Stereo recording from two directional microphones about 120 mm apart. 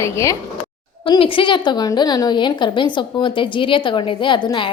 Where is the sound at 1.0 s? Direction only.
45° left (ahead or behind).